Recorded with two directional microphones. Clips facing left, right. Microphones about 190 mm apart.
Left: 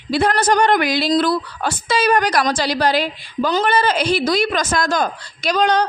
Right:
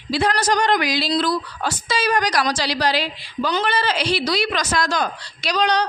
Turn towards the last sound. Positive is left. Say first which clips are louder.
# left 3 dB
turn(degrees=50)  # may be behind; listen again after turning